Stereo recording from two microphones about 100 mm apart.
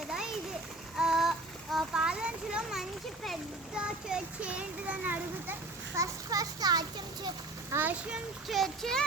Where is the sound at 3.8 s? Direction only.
10° right (ahead or behind).